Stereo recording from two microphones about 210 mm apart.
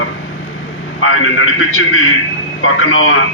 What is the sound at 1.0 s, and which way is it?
A man's voice, 75° left (ahead or behind).